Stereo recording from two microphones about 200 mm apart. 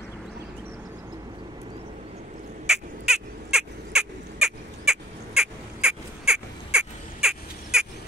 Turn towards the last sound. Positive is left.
turn(degrees=-5)  # may be behind; listen again after turning